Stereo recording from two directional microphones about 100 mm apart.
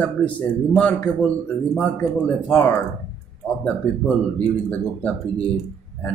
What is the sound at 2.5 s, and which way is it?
Speech, 20° left (ahead or behind).